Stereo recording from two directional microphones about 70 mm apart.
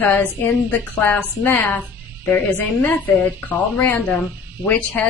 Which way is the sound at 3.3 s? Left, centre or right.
Left.